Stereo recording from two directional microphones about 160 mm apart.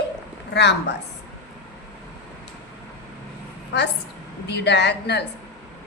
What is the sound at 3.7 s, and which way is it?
A woman's voice, 90° left.